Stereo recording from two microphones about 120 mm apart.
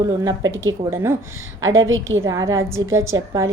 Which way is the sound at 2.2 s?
25° right (ahead or behind).